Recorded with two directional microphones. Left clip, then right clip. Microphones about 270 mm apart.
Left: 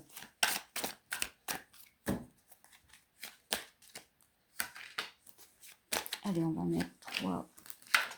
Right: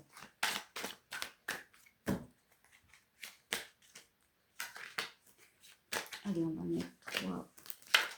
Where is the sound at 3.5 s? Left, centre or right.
Left.